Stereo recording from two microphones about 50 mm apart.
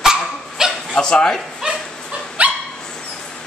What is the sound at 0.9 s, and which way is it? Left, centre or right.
Speech, centre.